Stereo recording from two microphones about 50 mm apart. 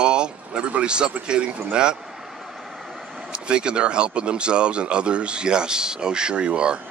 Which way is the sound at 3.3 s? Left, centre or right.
Centre.